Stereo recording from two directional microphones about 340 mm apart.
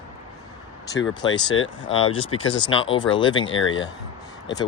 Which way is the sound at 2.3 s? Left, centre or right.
Left.